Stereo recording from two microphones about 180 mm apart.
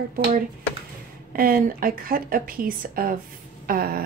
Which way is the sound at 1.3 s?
50° right (ahead or behind).